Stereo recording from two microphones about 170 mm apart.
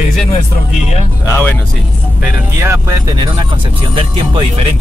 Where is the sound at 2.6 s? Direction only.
15° right (ahead or behind).